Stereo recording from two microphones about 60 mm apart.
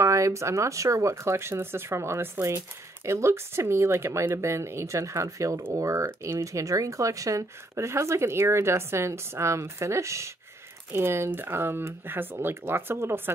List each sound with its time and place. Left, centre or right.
0.0 s speech: right
10.9 s speech: right